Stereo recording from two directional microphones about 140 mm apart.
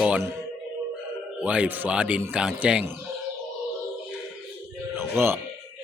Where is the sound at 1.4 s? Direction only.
10° right (ahead or behind).